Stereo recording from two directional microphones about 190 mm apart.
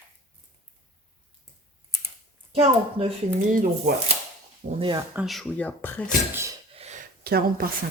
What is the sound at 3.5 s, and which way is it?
Speech, 45° right (ahead or behind).